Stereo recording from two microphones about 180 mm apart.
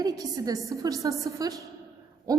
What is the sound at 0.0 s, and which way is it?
A woman's voice, 20° right (ahead or behind).